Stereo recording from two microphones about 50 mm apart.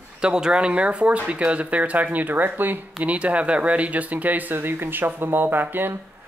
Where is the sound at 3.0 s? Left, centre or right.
Right.